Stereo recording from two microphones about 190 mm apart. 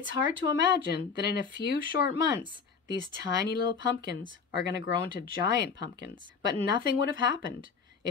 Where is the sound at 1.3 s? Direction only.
60° left (ahead or behind).